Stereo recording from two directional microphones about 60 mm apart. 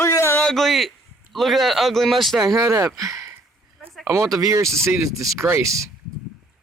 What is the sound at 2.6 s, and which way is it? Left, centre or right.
Speech, right.